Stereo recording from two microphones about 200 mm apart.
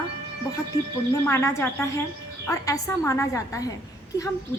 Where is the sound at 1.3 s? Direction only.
15° left (ahead or behind).